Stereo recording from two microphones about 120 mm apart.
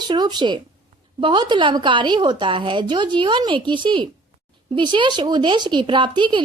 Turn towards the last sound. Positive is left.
turn(degrees=-40)  # may be behind; listen again after turning